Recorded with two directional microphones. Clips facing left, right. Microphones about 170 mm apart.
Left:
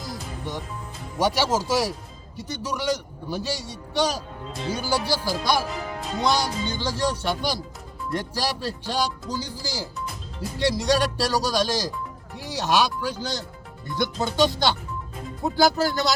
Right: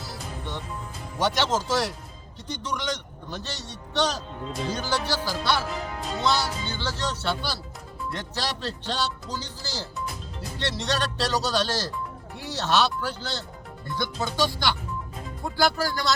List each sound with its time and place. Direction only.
0.0 s music: 15° left (ahead or behind)
1.2 s a man's voice: 10° left (ahead or behind)